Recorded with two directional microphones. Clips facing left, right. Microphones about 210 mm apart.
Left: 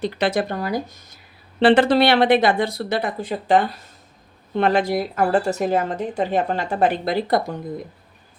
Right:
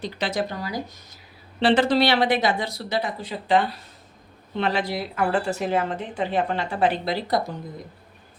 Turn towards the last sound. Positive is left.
turn(degrees=50)  # may be behind; listen again after turning